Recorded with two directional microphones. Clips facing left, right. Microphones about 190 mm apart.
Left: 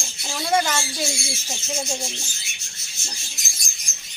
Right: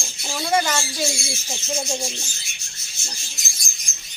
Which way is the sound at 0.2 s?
Centre (ahead or behind).